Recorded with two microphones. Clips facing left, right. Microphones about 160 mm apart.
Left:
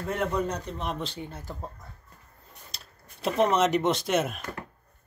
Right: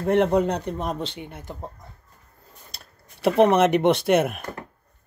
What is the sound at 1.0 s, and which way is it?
Speech, 20° right (ahead or behind).